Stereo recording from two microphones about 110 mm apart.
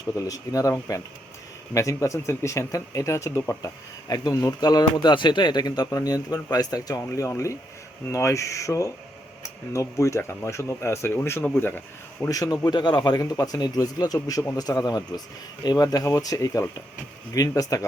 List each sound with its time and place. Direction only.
0.2 s speech: 30° left (ahead or behind)
12.3 s speech: 35° left (ahead or behind)